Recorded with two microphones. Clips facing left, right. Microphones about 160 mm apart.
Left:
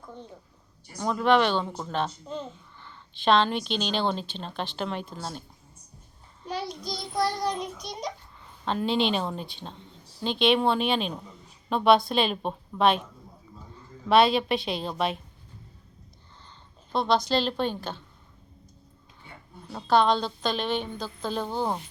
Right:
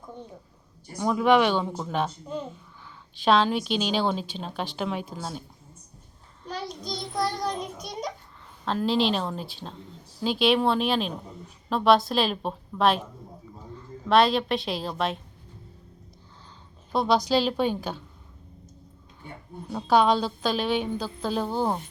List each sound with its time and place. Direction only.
0.9 s a woman's voice: 10° right (ahead or behind)
6.4 s child singing: 10° left (ahead or behind)
6.8 s a woman's voice: centre (ahead or behind)
14.1 s a woman's voice: centre (ahead or behind)
16.9 s a woman's voice: 10° right (ahead or behind)
19.7 s a woman's voice: 10° right (ahead or behind)